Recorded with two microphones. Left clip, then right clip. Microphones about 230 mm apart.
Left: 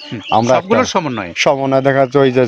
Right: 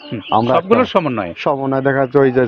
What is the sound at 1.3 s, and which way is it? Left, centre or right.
A man's voice, left.